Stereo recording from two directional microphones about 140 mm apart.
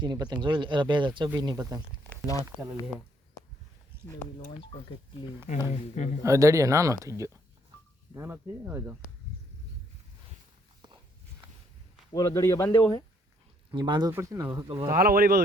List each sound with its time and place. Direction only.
0.0 s speech: 30° right (ahead or behind)
3.9 s a sound: 15° right (ahead or behind)
5.5 s speech: 60° left (ahead or behind)
6.2 s speech: 20° right (ahead or behind)
12.1 s a man's voice: 25° left (ahead or behind)
13.7 s speech: 35° right (ahead or behind)
14.1 s speech: 20° right (ahead or behind)
14.9 s speech: 90° right